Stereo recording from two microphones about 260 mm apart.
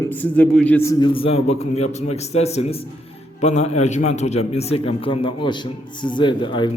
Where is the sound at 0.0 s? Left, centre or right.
Centre.